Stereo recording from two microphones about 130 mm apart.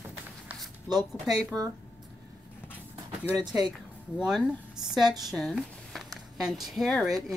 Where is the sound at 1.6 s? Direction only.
30° right (ahead or behind).